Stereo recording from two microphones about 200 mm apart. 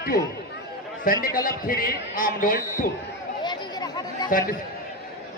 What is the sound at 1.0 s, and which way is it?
A man's voice, 45° left (ahead or behind).